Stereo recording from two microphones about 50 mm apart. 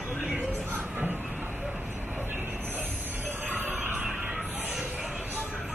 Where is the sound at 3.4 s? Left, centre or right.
Right.